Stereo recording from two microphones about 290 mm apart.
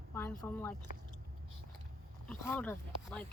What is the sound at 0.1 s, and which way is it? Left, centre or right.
Speech, centre.